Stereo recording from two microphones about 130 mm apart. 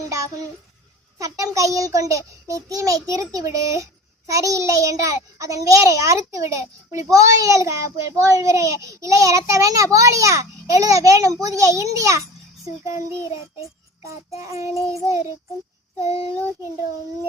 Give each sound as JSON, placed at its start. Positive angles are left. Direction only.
{"t": 1.2, "sound": "a child's voice", "side_deg": -25}
{"t": 14.3, "sound": "a child's voice", "side_deg": -25}